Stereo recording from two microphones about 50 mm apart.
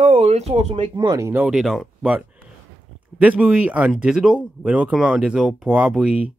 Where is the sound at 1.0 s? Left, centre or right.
Right.